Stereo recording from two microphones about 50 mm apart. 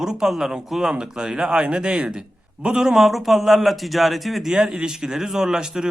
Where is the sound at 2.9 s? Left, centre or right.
Centre.